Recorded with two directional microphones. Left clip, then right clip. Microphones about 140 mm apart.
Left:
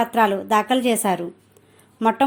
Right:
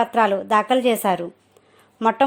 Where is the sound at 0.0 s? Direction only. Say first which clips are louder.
Even; 35° right (ahead or behind).